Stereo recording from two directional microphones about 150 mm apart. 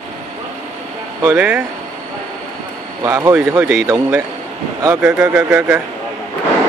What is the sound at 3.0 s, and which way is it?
Speech, 20° right (ahead or behind).